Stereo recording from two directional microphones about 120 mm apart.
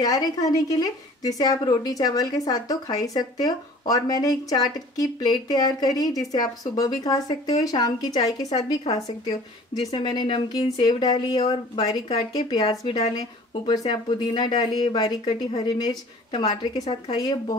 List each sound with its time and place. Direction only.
0.0 s a woman's voice: 30° left (ahead or behind)